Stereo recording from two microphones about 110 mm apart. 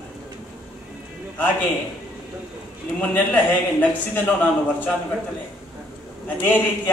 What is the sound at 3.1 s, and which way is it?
A man's voice, 15° left (ahead or behind).